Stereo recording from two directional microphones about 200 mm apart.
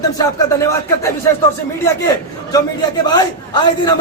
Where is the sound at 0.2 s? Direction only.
15° left (ahead or behind).